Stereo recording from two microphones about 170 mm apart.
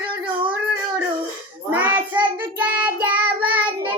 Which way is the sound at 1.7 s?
10° right (ahead or behind).